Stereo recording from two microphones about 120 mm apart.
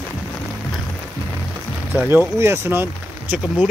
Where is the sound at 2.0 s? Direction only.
20° right (ahead or behind).